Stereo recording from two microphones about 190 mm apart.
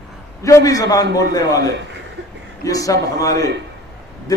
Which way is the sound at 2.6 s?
20° left (ahead or behind).